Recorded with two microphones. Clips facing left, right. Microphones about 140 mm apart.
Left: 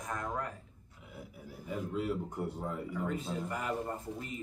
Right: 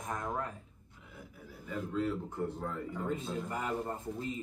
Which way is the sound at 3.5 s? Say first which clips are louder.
Even; 25° right (ahead or behind).